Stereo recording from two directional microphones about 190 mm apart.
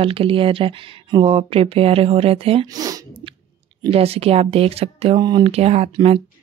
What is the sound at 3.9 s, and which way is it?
Speech, 30° right (ahead or behind).